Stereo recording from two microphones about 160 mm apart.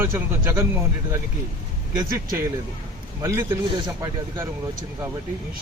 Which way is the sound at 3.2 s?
15° right (ahead or behind).